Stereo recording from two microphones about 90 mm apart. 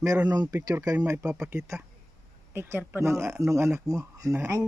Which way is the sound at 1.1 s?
35° right (ahead or behind).